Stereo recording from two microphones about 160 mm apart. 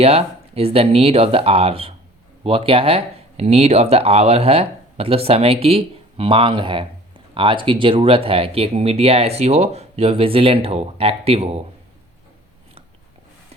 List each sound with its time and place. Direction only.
0.0 s speech: 40° right (ahead or behind)